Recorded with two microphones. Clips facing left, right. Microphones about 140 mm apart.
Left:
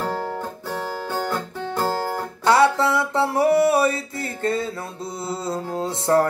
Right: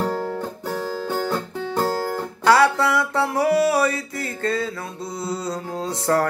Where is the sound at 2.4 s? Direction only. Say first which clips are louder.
Even; 25° left (ahead or behind).